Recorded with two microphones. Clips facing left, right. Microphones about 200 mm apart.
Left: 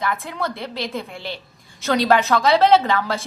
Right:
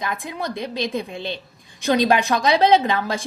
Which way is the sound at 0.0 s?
15° right (ahead or behind).